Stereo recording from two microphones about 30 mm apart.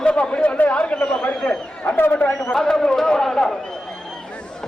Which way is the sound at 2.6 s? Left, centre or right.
Centre.